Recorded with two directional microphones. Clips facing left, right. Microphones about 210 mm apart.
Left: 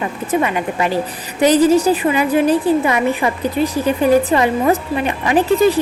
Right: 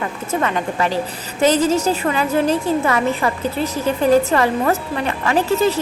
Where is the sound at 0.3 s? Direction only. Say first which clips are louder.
Left 2 dB; 15° left (ahead or behind).